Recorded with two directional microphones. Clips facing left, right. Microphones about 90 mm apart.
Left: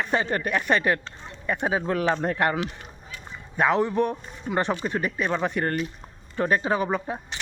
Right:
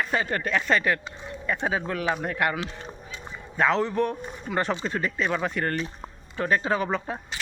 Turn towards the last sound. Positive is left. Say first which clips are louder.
# left 1 dB
turn(degrees=20)  # may be behind; listen again after turning